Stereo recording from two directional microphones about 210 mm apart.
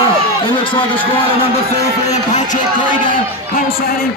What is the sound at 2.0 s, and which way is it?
Speech, 35° left (ahead or behind).